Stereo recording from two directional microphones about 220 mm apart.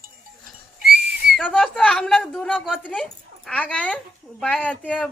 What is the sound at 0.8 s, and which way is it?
Whistle, 50° right (ahead or behind).